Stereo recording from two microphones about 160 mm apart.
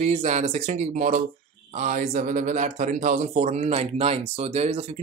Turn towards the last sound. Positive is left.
turn(degrees=-40)  # may be behind; listen again after turning